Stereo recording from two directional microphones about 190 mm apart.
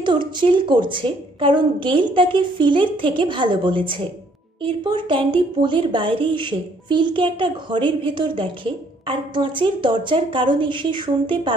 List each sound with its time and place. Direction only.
0.0 s a woman's voice: 25° right (ahead or behind)